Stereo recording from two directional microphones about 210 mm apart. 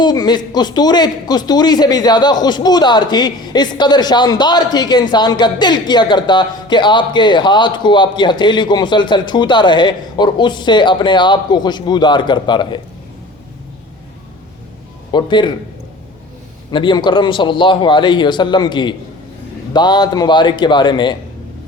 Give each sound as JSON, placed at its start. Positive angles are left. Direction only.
{"t": 0.0, "sound": "speech", "side_deg": 20}
{"t": 15.1, "sound": "speech", "side_deg": 20}
{"t": 16.7, "sound": "speech", "side_deg": 20}